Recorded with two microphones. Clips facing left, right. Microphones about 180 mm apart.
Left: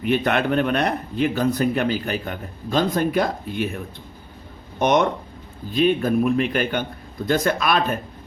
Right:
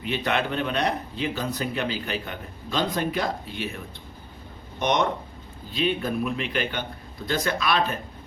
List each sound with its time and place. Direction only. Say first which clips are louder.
0.0 s speech: left 6 dB; 55° left (ahead or behind)
4.8 s speech: left 5 dB; 50° left (ahead or behind)